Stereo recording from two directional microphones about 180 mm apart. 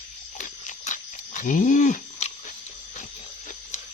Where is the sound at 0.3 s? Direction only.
45° left (ahead or behind).